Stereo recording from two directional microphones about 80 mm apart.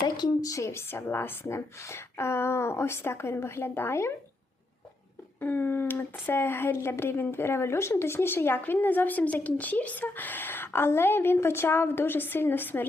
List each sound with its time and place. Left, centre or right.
0.0 s speech: left
5.4 s a woman's voice: left